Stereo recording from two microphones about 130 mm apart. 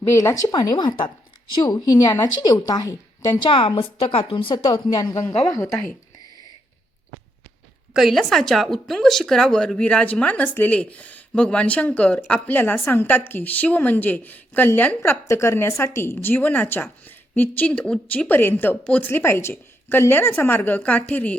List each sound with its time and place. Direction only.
0.1 s a woman's voice: 20° left (ahead or behind)
0.4 s a woman's voice: 35° left (ahead or behind)
7.9 s a woman's voice: centre (ahead or behind)